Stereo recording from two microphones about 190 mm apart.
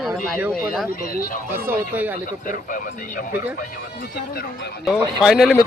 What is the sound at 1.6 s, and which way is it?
Speech, 10° right (ahead or behind).